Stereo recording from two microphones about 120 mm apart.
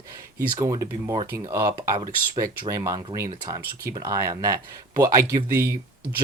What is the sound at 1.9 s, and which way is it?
Speech, 40° right (ahead or behind).